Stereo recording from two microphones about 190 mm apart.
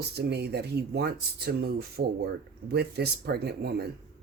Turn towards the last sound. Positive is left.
turn(degrees=-55)  # may be behind; listen again after turning